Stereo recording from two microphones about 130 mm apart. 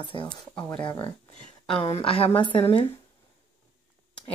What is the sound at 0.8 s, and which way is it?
A woman's voice, 40° left (ahead or behind).